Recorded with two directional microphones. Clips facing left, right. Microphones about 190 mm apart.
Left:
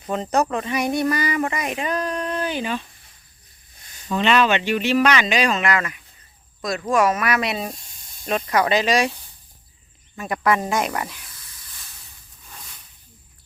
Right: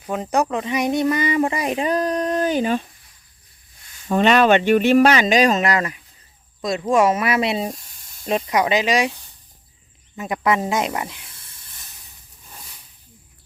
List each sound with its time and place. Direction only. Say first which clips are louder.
0.0 s speech: even; 10° right (ahead or behind); by 2.8 s 45° right (ahead or behind)
3.8 s a sound: left 2 dB; 40° left (ahead or behind)
4.1 s speech: right 4 dB; 45° right (ahead or behind)
6.6 s speech: right 2 dB; 25° right (ahead or behind)
10.2 s snake: right 1 dB; 20° right (ahead or behind)
12.5 s a sound: even; 10° right (ahead or behind)